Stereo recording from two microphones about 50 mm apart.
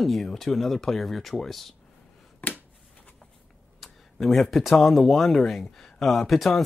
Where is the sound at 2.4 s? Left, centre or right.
Left.